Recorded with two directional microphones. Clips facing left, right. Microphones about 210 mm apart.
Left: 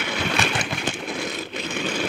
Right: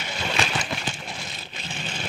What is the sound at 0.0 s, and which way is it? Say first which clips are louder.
Vehicle: left 3 dB; 60° left (ahead or behind).